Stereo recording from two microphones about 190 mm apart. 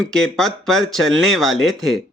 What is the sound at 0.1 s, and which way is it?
Speech, centre (ahead or behind).